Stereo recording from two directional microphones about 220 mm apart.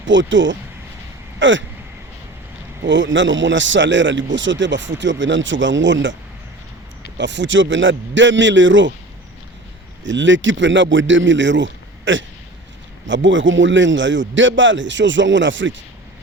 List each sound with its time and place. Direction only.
0.0 s speech: 55° right (ahead or behind)
2.8 s speech: 55° right (ahead or behind)
7.2 s speech: 55° right (ahead or behind)
10.0 s speech: 55° right (ahead or behind)